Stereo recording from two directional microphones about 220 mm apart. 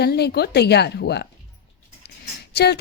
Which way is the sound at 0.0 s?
45° left (ahead or behind).